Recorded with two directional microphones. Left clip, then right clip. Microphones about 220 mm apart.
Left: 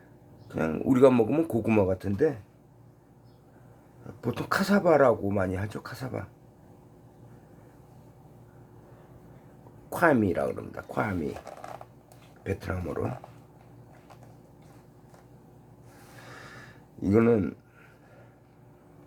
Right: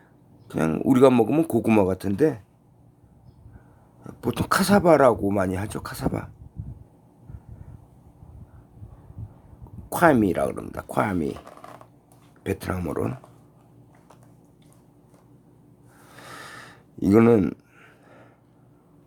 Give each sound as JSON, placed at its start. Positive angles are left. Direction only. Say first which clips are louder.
{"t": 0.4, "sound": "speech", "louder": "right 5 dB", "side_deg": -45}
{"t": 4.0, "sound": "speech", "louder": "right 5 dB", "side_deg": -45}
{"t": 9.9, "sound": "speech", "louder": "right 5 dB", "side_deg": -40}
{"t": 12.4, "sound": "speech", "louder": "right 5 dB", "side_deg": -45}
{"t": 16.2, "sound": "a sound", "louder": "right 7 dB", "side_deg": -50}